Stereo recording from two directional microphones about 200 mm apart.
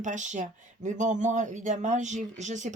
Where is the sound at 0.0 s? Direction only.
40° right (ahead or behind).